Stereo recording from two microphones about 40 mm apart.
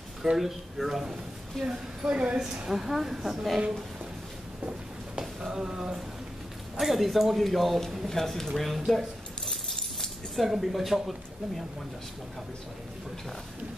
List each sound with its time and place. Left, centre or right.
0.4 s speech: centre
1.6 s a woman's voice: centre
2.7 s speech: centre
5.2 s a sound: centre
6.8 s speech: centre
8.1 s speech: centre
10.3 s speech: centre